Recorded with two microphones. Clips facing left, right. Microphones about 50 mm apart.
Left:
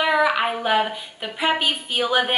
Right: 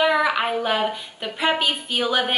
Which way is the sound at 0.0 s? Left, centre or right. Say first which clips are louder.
Even; centre.